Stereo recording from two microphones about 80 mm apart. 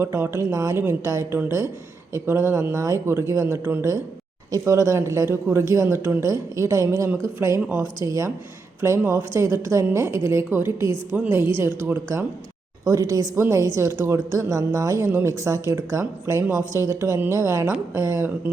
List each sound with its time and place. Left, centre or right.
0.0 s speech: right
12.8 s speech: right